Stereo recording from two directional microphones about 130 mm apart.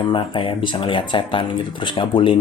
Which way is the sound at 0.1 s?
40° left (ahead or behind).